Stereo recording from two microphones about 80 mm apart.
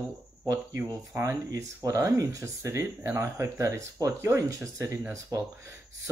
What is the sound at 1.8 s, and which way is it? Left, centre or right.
Speech, right.